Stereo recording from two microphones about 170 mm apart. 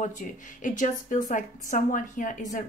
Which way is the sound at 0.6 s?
50° left (ahead or behind).